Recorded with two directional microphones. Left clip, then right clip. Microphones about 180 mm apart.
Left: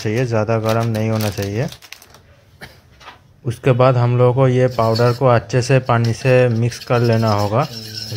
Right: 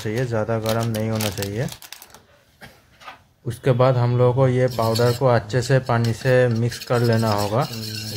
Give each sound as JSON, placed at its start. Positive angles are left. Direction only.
{"t": 0.0, "sound": "speech", "side_deg": 15}
{"t": 3.6, "sound": "speech", "side_deg": 10}